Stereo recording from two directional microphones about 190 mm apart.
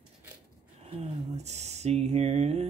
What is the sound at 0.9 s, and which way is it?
Speech, 35° right (ahead or behind).